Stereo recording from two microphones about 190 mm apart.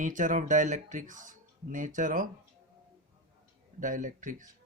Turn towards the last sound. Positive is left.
turn(degrees=-40)  # may be behind; listen again after turning